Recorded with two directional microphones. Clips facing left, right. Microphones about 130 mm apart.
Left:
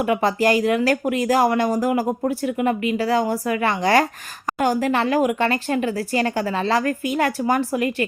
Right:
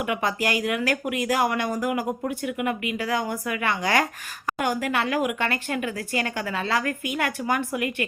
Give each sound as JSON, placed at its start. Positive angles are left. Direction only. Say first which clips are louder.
{"t": 0.1, "sound": "speech", "louder": "left 8 dB", "side_deg": 35}